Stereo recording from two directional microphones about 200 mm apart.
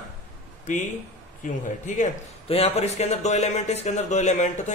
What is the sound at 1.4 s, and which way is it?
Speech, 40° left (ahead or behind).